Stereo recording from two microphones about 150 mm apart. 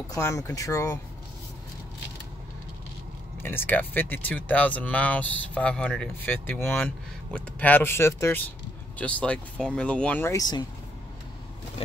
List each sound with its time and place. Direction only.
0.1 s speech: 20° left (ahead or behind)
3.4 s speech: 15° left (ahead or behind)